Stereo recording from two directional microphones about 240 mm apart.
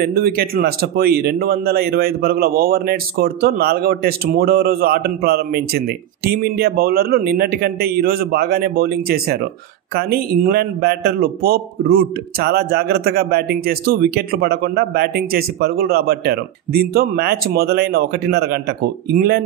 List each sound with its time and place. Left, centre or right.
0.0 s a man's voice: right